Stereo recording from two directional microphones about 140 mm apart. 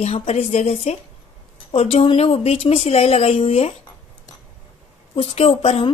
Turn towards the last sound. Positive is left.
turn(degrees=40)  # may be behind; listen again after turning